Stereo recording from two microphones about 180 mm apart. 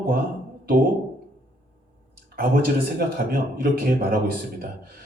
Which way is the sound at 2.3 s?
55° right (ahead or behind).